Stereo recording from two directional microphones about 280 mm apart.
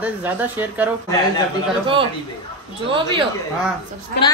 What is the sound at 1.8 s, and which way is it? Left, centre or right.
Speech, centre.